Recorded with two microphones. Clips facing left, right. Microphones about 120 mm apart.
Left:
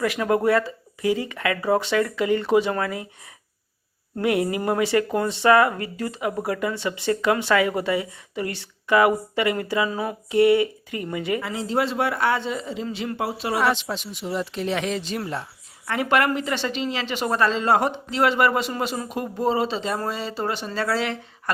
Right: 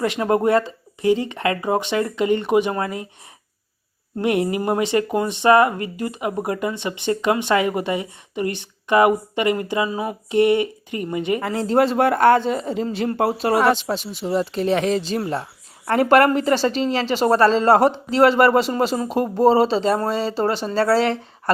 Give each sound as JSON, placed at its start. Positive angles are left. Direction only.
{"t": 0.0, "sound": "speech", "side_deg": -25}
{"t": 4.2, "sound": "speech", "side_deg": -25}
{"t": 11.4, "sound": "a woman's voice", "side_deg": -45}